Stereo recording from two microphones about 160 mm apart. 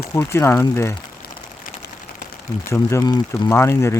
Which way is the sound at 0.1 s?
15° left (ahead or behind).